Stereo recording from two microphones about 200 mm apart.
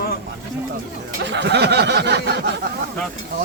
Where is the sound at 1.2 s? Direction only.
60° right (ahead or behind).